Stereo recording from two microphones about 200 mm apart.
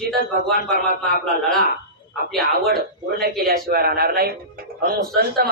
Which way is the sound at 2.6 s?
50° right (ahead or behind).